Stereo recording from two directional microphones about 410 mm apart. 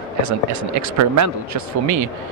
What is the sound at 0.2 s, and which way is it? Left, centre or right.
Speech, right.